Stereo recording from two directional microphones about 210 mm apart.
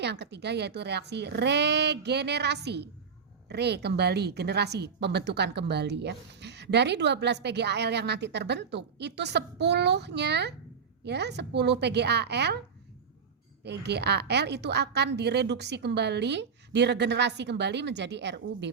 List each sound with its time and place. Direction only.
0.0 s a woman's voice: 55° right (ahead or behind)
13.7 s a woman's voice: 50° right (ahead or behind)